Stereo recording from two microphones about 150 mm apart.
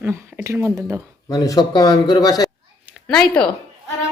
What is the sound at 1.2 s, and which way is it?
Speech, 25° left (ahead or behind).